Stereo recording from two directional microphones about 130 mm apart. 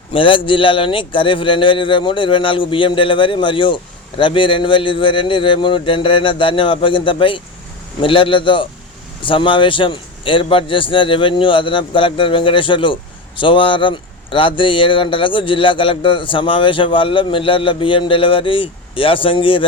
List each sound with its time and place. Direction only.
0.1 s a man's voice: 40° left (ahead or behind)